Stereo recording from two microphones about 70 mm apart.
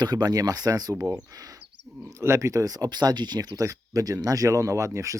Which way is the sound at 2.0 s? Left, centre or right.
Right.